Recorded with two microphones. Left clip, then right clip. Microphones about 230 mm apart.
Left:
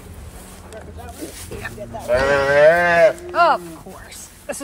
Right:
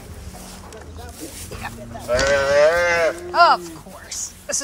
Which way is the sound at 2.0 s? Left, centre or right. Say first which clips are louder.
Left 1 dB; left.